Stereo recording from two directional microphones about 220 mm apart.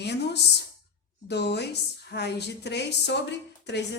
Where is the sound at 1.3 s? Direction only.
50° left (ahead or behind).